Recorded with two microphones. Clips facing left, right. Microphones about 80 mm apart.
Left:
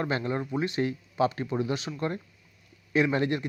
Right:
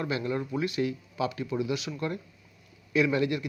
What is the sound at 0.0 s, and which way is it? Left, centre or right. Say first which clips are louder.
Speech: left 1 dB; left.